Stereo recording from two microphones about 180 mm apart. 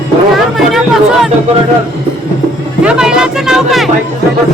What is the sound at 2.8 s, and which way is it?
Music, 5° right (ahead or behind).